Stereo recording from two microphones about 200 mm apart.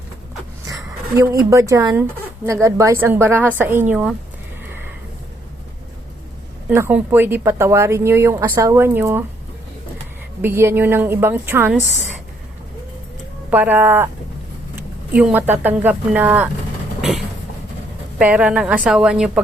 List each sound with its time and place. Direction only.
0.7 s speech: 15° right (ahead or behind)
6.7 s speech: 10° right (ahead or behind)
10.4 s speech: 10° right (ahead or behind)
13.5 s speech: 10° right (ahead or behind)
17.0 s vehicle: centre (ahead or behind)
18.2 s a woman's voice: 5° right (ahead or behind)